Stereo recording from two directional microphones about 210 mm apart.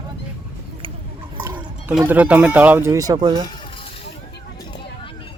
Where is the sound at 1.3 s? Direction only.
10° right (ahead or behind).